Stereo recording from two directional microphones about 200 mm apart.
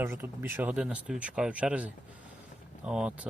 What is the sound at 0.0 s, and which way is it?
Speech, 10° right (ahead or behind).